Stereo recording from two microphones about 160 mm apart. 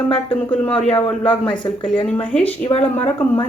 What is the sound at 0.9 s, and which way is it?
A man's voice, 35° left (ahead or behind).